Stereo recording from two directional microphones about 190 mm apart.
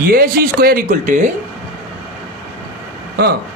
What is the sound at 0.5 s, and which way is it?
Speech, 50° right (ahead or behind).